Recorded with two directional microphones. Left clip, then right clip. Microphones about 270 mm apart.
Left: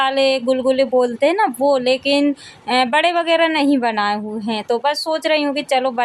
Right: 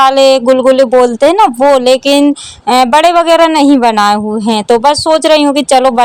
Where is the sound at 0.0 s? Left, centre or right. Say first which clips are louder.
Right 10 dB; right.